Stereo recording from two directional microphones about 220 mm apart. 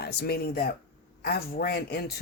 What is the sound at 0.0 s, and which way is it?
Speech, 45° left (ahead or behind).